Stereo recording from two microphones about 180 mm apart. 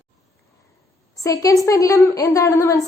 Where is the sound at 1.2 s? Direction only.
20° left (ahead or behind).